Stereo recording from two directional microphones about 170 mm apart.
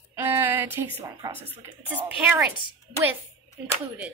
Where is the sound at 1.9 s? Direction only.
10° right (ahead or behind).